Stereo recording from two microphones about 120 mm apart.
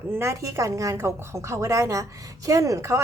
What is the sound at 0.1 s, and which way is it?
A woman's voice, 25° right (ahead or behind).